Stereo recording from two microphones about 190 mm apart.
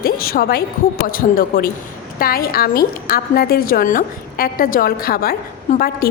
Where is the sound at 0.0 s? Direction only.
50° left (ahead or behind).